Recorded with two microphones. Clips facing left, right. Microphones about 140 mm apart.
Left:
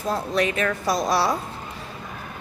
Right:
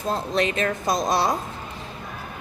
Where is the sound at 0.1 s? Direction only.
25° right (ahead or behind).